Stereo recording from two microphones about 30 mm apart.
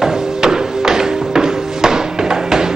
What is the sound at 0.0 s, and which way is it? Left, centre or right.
Music, centre.